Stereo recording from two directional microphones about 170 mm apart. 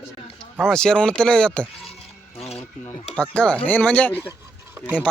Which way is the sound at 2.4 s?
35° left (ahead or behind).